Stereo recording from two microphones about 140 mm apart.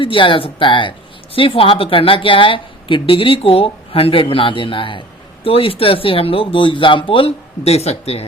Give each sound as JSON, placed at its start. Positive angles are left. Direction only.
{"t": 0.0, "sound": "speech", "side_deg": 40}